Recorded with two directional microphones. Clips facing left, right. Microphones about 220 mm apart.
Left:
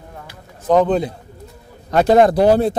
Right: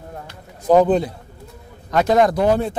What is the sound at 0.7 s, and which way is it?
Speech, 5° right (ahead or behind).